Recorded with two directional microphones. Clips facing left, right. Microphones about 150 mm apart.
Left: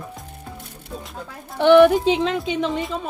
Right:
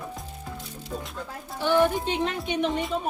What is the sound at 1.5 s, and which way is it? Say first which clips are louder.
Speech: left 10 dB; 80° left.